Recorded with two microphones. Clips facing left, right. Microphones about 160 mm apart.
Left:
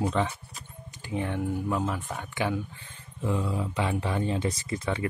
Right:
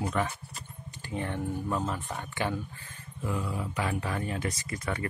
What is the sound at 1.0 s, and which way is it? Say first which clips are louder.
Speech: left 3 dB; 15° left (ahead or behind).